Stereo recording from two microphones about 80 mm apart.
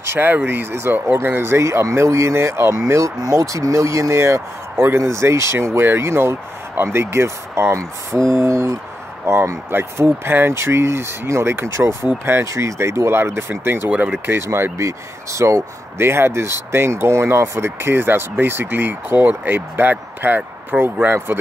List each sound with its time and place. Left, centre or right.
0.1 s speech: right
3.2 s speech: right
13.8 s speech: centre
14.2 s speech: right